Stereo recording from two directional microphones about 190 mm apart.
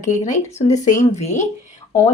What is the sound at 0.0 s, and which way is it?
Speech, 40° left (ahead or behind).